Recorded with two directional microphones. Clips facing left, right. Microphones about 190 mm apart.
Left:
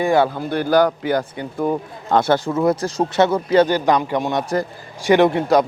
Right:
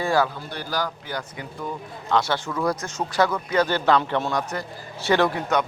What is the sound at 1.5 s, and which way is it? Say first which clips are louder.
Speech: left 12 dB; 55° left (ahead or behind).